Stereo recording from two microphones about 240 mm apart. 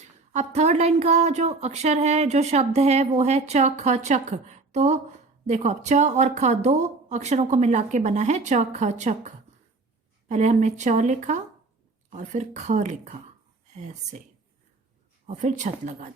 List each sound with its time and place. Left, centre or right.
0.3 s speech: right
15.3 s speech: right